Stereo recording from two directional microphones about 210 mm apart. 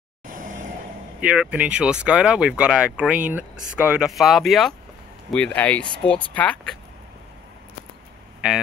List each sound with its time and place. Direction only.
0.3 s vehicle: 40° right (ahead or behind)
1.2 s speech: 5° right (ahead or behind)